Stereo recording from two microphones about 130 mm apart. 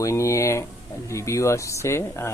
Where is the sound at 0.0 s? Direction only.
25° left (ahead or behind).